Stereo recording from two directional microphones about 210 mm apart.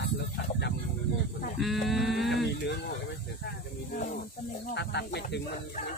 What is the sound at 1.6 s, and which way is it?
Speech, centre (ahead or behind).